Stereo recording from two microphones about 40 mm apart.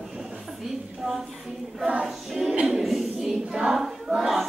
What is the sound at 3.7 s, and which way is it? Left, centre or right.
Battle cry, centre.